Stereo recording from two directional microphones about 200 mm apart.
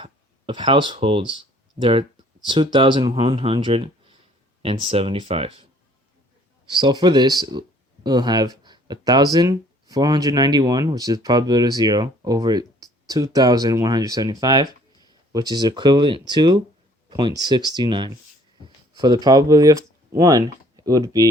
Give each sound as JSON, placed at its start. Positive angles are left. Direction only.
{"t": 0.0, "sound": "speech", "side_deg": -25}
{"t": 6.7, "sound": "speech", "side_deg": -20}